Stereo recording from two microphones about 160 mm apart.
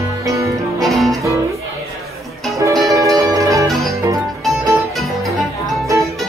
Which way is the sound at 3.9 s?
20° right (ahead or behind).